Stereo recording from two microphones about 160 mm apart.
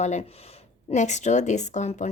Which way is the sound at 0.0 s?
45° left (ahead or behind).